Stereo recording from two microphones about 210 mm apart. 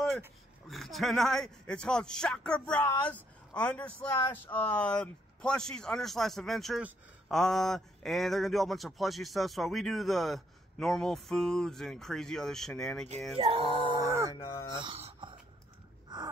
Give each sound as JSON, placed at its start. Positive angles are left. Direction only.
{"t": 0.7, "sound": "speech", "side_deg": 0}
{"t": 13.4, "sound": "speech", "side_deg": -25}
{"t": 14.3, "sound": "speech", "side_deg": 15}
{"t": 14.8, "sound": "a sound", "side_deg": -25}